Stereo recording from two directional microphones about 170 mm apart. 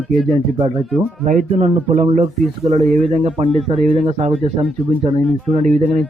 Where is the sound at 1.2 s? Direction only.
50° right (ahead or behind).